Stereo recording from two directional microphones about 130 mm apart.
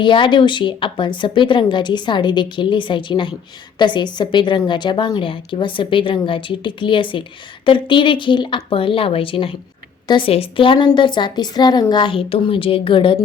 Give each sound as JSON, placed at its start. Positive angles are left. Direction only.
{"t": 0.0, "sound": "a woman's voice", "side_deg": 40}